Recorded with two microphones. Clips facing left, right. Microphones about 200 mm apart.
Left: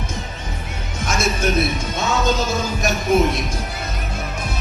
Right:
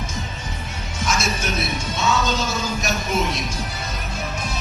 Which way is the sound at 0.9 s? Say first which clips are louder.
Left 2 dB; 55° left (ahead or behind).